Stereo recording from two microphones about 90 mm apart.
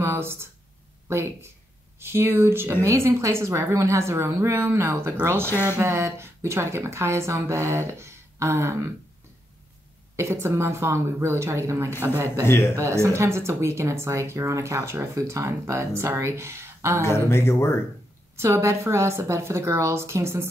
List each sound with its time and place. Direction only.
0.0 s a sound: 25° right (ahead or behind)
1.0 s a woman's voice: 30° right (ahead or behind)
5.5 s speech: 25° left (ahead or behind)
5.8 s a woman's voice: 30° right (ahead or behind)
10.4 s a woman's voice: 30° right (ahead or behind)
12.4 s speech: 30° left (ahead or behind)
12.7 s speech: 30° right (ahead or behind)
17.0 s speech: 30° left (ahead or behind)
18.3 s a woman's voice: 30° right (ahead or behind)